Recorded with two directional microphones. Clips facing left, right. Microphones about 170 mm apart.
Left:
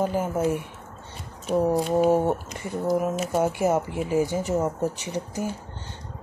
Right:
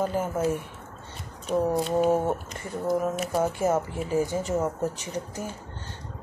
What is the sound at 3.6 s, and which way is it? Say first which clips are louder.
Speech: left 2 dB; 15° left (ahead or behind).